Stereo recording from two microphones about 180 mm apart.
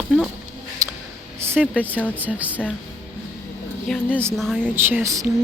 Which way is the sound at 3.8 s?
5° left (ahead or behind).